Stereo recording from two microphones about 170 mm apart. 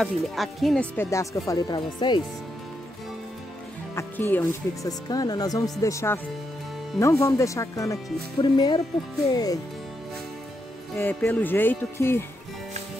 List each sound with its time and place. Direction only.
0.0 s speech: centre (ahead or behind)
0.9 s speech: 15° left (ahead or behind)
3.9 s speech: 15° left (ahead or behind)
11.0 s speech: 10° left (ahead or behind)